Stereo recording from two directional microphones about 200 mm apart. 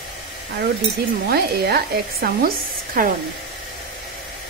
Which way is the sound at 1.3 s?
50° right (ahead or behind).